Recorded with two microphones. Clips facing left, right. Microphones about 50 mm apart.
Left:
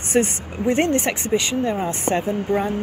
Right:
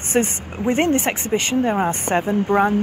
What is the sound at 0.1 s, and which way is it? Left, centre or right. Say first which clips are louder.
Speech: even; right.